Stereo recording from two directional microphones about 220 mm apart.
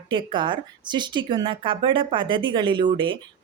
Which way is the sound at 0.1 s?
20° right (ahead or behind).